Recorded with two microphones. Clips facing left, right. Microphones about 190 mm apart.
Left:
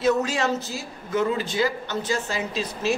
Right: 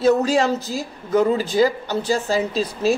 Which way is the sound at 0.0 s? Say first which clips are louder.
Right 5 dB; 35° right (ahead or behind).